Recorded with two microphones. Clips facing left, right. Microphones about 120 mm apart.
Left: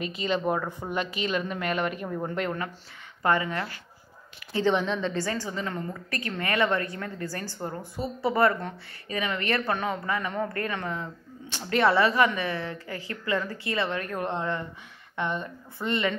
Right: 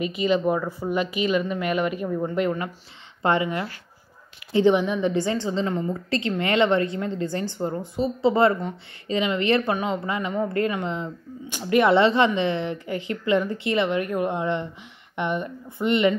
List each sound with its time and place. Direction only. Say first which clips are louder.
0.4 s a woman's voice: right 4 dB; centre (ahead or behind)
3.2 s a woman's voice: right 3 dB; 20° right (ahead or behind)
11.9 s a woman's voice: right 4 dB; 25° right (ahead or behind)